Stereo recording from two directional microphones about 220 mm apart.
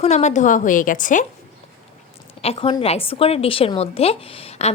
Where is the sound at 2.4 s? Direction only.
25° left (ahead or behind).